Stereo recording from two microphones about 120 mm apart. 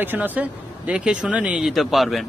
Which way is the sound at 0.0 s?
15° right (ahead or behind).